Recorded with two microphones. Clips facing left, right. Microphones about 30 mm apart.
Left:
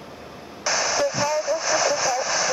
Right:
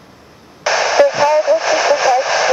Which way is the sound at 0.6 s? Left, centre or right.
Right.